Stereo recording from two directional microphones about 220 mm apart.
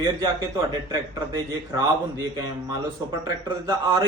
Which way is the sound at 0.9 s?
15° right (ahead or behind).